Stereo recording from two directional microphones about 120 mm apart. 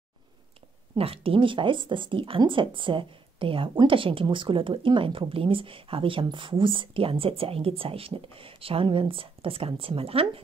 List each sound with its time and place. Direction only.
0.9 s speech: 50° right (ahead or behind)